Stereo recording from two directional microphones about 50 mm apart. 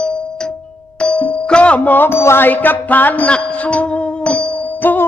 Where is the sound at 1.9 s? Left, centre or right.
Left.